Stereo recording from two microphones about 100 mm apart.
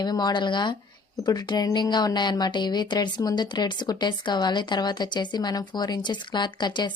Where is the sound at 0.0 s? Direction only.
45° left (ahead or behind).